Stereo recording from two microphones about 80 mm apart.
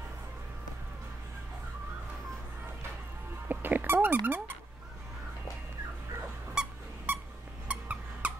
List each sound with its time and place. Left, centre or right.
3.4 s dog: right
6.6 s squeak: centre
7.1 s a sound: right